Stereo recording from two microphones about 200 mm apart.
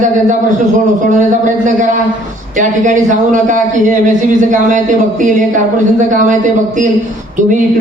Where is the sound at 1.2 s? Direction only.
40° right (ahead or behind).